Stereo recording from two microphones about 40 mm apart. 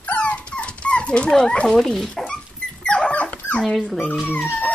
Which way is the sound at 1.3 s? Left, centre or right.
Centre.